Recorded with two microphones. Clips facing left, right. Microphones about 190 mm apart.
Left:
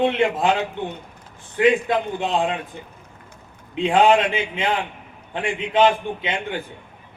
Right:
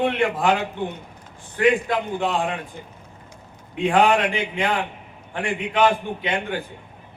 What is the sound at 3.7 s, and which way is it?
Speech, 20° left (ahead or behind).